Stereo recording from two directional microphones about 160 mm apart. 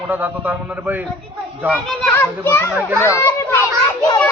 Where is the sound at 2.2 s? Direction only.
15° left (ahead or behind).